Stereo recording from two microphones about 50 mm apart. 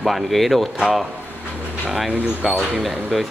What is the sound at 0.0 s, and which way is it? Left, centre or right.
Speech, centre.